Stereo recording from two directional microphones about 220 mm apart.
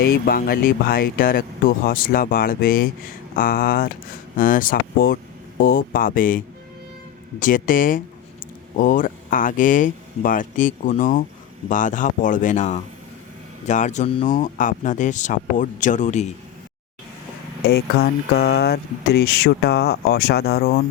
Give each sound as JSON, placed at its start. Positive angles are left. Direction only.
{"t": 0.0, "sound": "speech", "side_deg": 45}
{"t": 17.7, "sound": "speech", "side_deg": 45}